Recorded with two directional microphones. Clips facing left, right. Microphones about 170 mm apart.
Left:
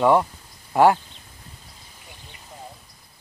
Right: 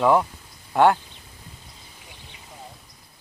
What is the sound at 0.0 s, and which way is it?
Speech, centre (ahead or behind).